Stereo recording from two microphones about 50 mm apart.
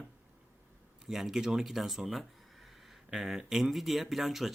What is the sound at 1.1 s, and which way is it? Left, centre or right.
Speech, centre.